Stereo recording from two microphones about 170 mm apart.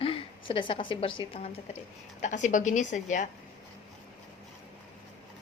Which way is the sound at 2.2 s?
45° left (ahead or behind).